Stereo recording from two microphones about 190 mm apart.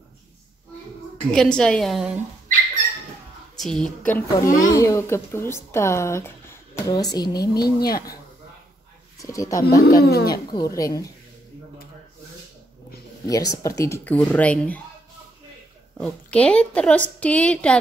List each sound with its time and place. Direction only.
1.3 s a woman's voice: 5° left (ahead or behind)
3.5 s a woman's voice: centre (ahead or behind); by 7.7 s 20° left (ahead or behind)
7.8 s speech: 55° left (ahead or behind)
9.2 s a woman's voice: 15° left (ahead or behind)
9.8 s speech: 55° left (ahead or behind)
10.3 s a woman's voice: 20° left (ahead or behind)
13.3 s a woman's voice: 20° left (ahead or behind)
16.0 s a woman's voice: 5° left (ahead or behind)